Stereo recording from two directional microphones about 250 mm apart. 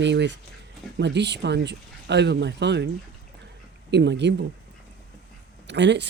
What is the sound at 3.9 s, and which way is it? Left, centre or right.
Speech, right.